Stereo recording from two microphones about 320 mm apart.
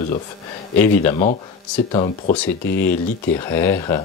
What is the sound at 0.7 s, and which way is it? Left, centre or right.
Speech, centre.